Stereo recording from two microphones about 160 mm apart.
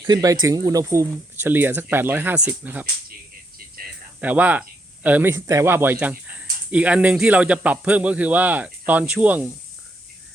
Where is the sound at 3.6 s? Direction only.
70° right (ahead or behind).